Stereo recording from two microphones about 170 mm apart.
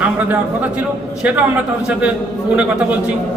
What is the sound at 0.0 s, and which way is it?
Speech, 10° right (ahead or behind).